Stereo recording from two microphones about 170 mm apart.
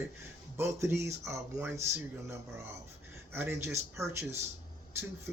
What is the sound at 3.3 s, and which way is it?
Speech, 15° right (ahead or behind).